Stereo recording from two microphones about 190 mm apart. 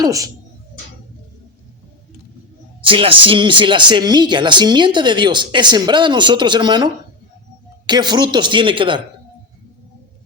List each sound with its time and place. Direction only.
0.0 s speech: 15° right (ahead or behind)
2.8 s speech: 30° right (ahead or behind)